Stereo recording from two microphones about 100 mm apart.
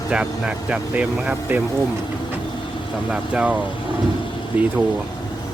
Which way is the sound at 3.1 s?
10° right (ahead or behind).